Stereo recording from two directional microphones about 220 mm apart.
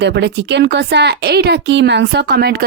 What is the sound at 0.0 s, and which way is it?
Speech, 50° right (ahead or behind).